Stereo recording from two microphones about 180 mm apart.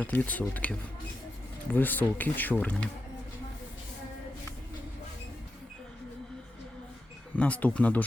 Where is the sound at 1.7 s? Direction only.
10° left (ahead or behind).